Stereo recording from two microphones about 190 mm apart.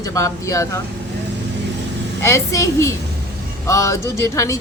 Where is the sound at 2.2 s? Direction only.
15° left (ahead or behind).